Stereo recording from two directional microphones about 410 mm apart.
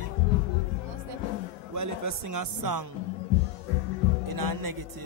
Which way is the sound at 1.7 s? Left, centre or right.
Right.